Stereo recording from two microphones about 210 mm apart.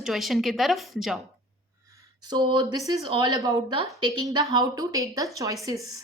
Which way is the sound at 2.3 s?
20° right (ahead or behind).